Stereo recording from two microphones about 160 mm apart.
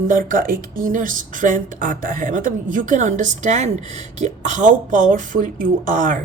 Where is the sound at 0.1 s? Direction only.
55° right (ahead or behind).